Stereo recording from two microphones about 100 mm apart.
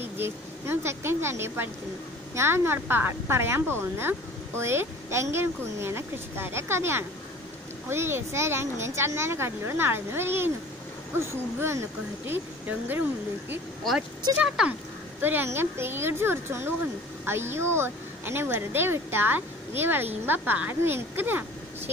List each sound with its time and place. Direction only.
0.0 s a woman's voice: 25° right (ahead or behind)
14.6 s speech: 5° right (ahead or behind)
15.2 s a woman's voice: 20° right (ahead or behind)